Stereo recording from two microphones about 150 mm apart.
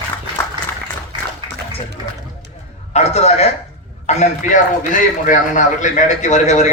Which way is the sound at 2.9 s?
45° left (ahead or behind).